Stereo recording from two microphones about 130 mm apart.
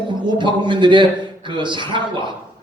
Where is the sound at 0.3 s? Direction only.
35° right (ahead or behind).